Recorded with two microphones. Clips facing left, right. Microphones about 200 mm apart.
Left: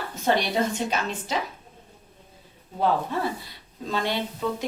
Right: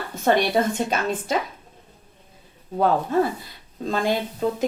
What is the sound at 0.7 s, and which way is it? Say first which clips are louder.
Speech: right 4 dB; 55° right (ahead or behind).